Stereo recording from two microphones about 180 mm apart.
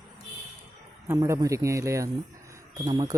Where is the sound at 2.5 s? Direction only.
20° right (ahead or behind).